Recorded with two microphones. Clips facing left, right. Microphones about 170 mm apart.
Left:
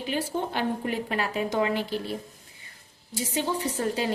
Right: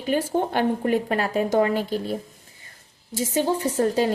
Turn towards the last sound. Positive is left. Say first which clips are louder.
# right 6 dB
turn(degrees=-40)  # may be behind; listen again after turning